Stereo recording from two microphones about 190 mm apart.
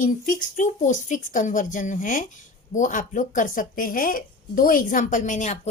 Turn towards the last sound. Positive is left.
turn(degrees=40)  # may be behind; listen again after turning